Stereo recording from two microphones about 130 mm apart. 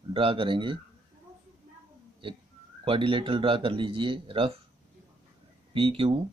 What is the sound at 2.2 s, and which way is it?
Speech, 45° right (ahead or behind).